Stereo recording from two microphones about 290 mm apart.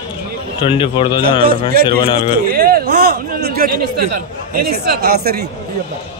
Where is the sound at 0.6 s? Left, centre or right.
Centre.